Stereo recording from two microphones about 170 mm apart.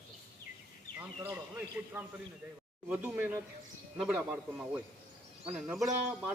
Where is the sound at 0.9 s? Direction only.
15° right (ahead or behind).